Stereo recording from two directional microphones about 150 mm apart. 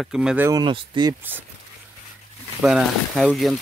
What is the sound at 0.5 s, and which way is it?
Speech, 30° right (ahead or behind).